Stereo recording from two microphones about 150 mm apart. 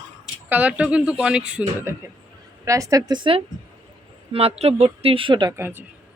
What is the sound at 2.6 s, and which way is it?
A woman's voice, 20° right (ahead or behind).